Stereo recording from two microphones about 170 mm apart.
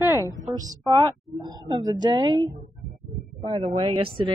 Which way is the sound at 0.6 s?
20° right (ahead or behind).